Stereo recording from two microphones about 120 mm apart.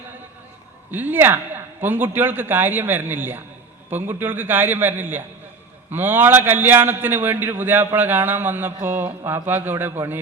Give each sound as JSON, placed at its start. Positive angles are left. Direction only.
{"t": 0.9, "sound": "a man's voice", "side_deg": -15}